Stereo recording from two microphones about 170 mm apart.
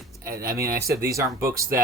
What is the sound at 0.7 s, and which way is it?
Speech, 60° right (ahead or behind).